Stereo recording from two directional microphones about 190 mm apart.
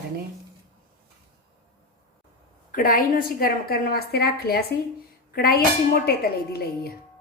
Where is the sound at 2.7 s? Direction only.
50° left (ahead or behind).